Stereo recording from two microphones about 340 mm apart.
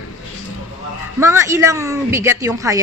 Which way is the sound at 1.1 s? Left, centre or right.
Centre.